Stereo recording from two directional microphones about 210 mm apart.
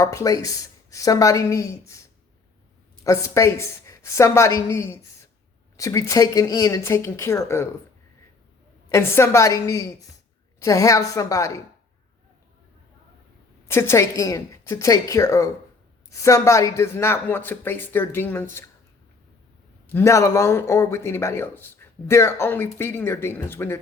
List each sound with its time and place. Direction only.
0.0 s speech: 15° left (ahead or behind)
3.0 s speech: 15° left (ahead or behind)
8.9 s speech: 10° left (ahead or behind)
13.7 s speech: 10° left (ahead or behind)
19.9 s speech: 10° left (ahead or behind)